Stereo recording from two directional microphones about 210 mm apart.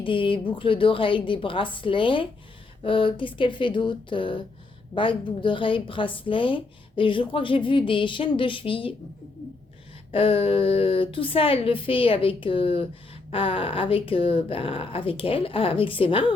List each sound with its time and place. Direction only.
0.0 s speech: 25° left (ahead or behind)
10.1 s speech: 25° left (ahead or behind)